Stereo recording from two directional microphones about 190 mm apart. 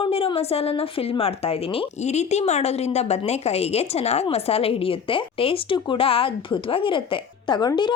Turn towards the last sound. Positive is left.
turn(degrees=25)  # may be behind; listen again after turning